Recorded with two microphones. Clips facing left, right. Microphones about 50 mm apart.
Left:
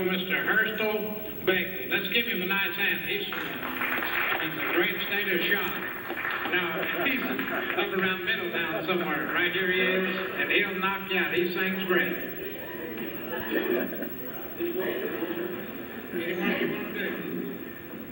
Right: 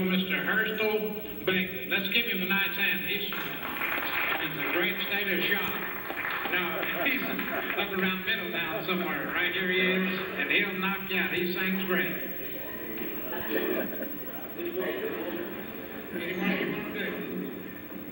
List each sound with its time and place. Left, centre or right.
0.0 s speech: centre
3.8 s music: centre
4.1 s speech: centre
13.5 s speech: centre
14.8 s a man's voice: centre